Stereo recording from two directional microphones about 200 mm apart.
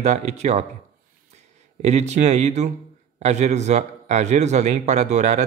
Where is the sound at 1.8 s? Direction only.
35° right (ahead or behind).